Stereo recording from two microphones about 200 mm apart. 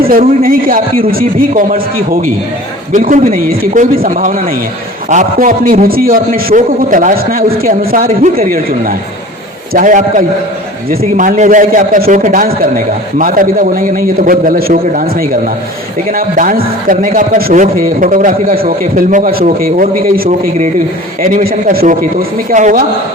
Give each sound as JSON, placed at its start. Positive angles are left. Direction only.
{"t": 0.0, "sound": "a man's voice", "side_deg": -45}
{"t": 2.9, "sound": "a man's voice", "side_deg": -40}